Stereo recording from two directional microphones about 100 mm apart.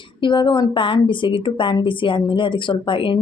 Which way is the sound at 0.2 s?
55° left (ahead or behind).